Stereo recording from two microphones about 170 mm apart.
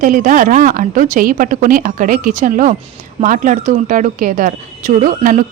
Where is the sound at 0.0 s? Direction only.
50° right (ahead or behind).